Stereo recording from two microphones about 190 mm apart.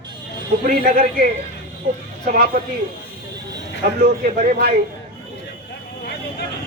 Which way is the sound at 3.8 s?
55° right (ahead or behind).